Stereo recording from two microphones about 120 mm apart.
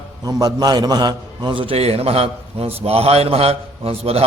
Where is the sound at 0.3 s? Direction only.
35° right (ahead or behind).